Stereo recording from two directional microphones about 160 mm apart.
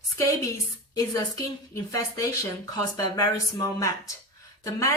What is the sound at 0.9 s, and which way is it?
Speech, 20° left (ahead or behind).